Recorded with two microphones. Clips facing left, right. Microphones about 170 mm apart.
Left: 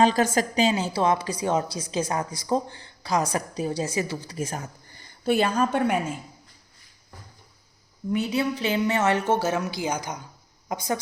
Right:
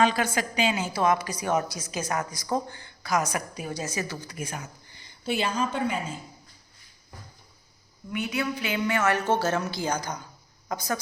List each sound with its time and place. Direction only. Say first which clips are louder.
0.0 s a woman's voice: left 4 dB; 40° left (ahead or behind)
4.4 s a woman's voice: left 5 dB; 40° left (ahead or behind); by 6.0 s 60° left (ahead or behind)
8.1 s a woman's voice: left 4 dB; 35° left (ahead or behind); by 10.2 s 15° left (ahead or behind)